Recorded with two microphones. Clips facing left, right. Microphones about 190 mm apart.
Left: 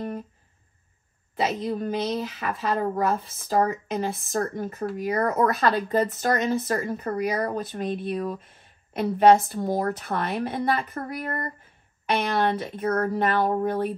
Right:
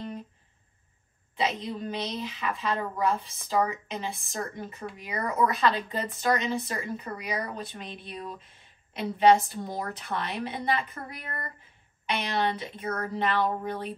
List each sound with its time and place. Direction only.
1.6 s speech: 50° left (ahead or behind)
12.1 s speech: 50° left (ahead or behind)